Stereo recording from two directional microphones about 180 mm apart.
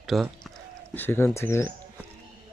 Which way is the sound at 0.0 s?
Centre (ahead or behind).